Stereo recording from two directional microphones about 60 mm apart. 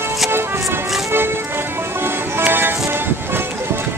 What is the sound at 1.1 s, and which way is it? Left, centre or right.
Music, right.